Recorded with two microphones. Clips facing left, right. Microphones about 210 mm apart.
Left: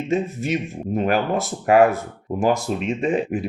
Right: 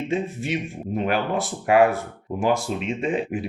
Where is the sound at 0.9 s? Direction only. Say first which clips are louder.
Left 3 dB; 45° left (ahead or behind).